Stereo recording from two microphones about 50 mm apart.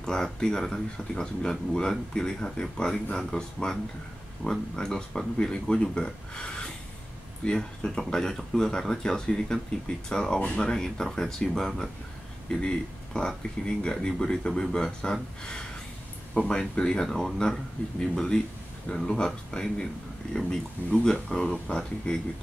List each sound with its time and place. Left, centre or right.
0.0 s speech: centre
16.3 s speech: centre
21.0 s speech: centre